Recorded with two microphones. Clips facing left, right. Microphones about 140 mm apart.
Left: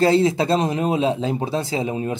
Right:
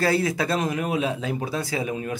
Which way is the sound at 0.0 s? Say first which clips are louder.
Left 6 dB; 25° left (ahead or behind).